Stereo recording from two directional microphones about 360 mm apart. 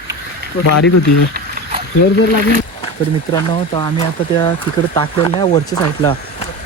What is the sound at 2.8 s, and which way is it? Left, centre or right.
Speech, centre.